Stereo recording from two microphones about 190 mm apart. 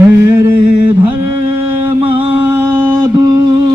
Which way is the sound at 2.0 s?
30° right (ahead or behind).